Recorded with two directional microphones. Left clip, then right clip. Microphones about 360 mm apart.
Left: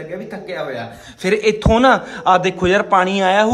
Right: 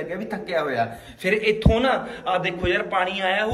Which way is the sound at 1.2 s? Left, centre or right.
Centre.